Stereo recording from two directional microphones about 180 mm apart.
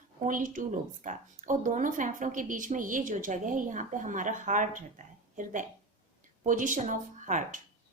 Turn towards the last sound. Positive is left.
turn(degrees=-45)  # may be behind; listen again after turning